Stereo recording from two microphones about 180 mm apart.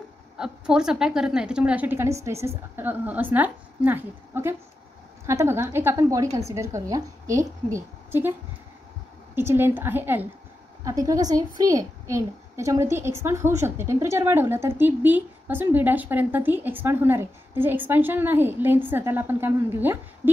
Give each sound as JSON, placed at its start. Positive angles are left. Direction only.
{"t": 0.4, "sound": "a woman's voice", "side_deg": -5}